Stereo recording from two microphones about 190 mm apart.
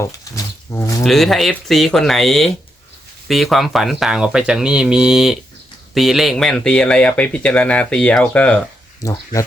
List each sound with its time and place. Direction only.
0.0 s a sound: 15° left (ahead or behind)
1.0 s speech: centre (ahead or behind)
9.0 s speech: 20° left (ahead or behind)